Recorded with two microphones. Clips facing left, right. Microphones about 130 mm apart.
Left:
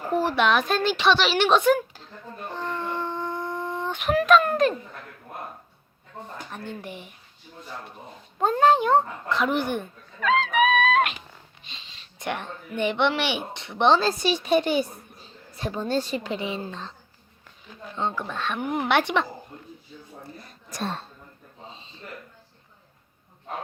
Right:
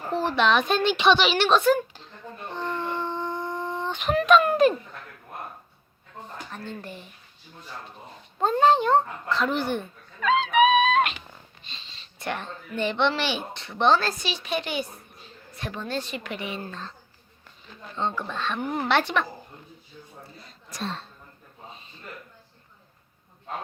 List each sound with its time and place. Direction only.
0.1 s a woman's voice: 10° left (ahead or behind)
1.4 s speech: 15° left (ahead or behind)
2.6 s a sound: centre (ahead or behind)
4.4 s a woman's voice: 5° right (ahead or behind)
6.5 s speech: 15° left (ahead or behind)
8.4 s speech: 10° left (ahead or behind)
10.2 s speech: centre (ahead or behind)
11.7 s speech: 15° left (ahead or behind)
14.2 s a woman's voice: 40° left (ahead or behind); by 16.9 s 20° left (ahead or behind)
17.9 s speech: 10° left (ahead or behind)
20.5 s speech: 50° left (ahead or behind)
21.7 s a sound: 25° left (ahead or behind)